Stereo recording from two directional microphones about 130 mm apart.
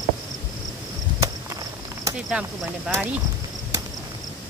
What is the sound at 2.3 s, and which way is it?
Speech, 5° right (ahead or behind).